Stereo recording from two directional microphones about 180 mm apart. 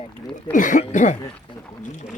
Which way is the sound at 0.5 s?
45° left (ahead or behind).